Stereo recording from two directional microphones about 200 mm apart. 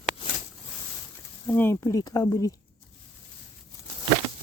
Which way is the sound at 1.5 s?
10° left (ahead or behind).